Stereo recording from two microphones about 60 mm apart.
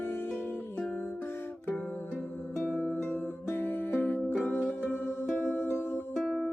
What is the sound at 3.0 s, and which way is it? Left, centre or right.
Music, left.